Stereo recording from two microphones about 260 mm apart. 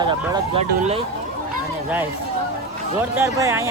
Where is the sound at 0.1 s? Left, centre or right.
Centre.